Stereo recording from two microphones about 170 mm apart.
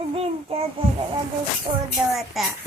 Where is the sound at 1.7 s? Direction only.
25° right (ahead or behind).